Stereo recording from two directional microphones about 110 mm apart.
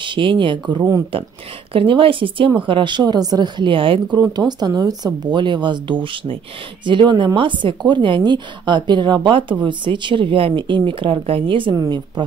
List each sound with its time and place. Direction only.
0.0 s speech: 50° right (ahead or behind)
4.2 s speech: 40° right (ahead or behind)
11.7 s speech: 35° right (ahead or behind)